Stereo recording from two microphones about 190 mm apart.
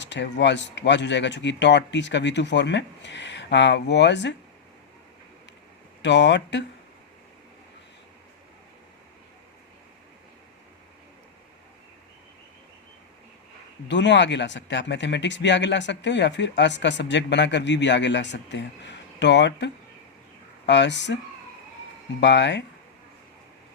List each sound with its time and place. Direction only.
0.0 s speech: 70° left (ahead or behind)
6.0 s speech: 70° left (ahead or behind)
13.8 s speech: 70° left (ahead or behind)
22.2 s speech: 70° left (ahead or behind)